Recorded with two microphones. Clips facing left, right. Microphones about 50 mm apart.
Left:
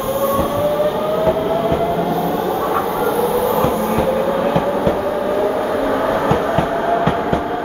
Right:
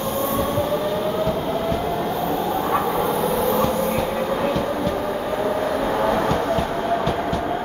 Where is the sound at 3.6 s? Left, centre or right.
Left.